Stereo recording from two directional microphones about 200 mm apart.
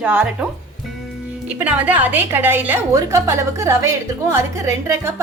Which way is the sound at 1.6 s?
10° right (ahead or behind).